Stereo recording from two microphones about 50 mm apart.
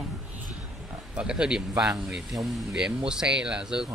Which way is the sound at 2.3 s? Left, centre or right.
Centre.